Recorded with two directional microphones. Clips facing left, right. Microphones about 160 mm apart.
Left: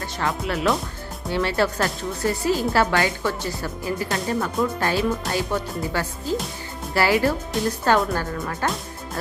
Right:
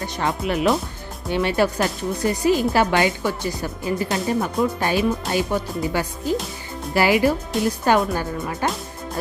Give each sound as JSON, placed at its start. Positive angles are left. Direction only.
{"t": 0.2, "sound": "speech", "side_deg": -20}